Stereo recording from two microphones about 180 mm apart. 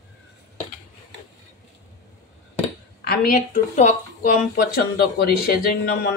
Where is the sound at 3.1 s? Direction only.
50° left (ahead or behind).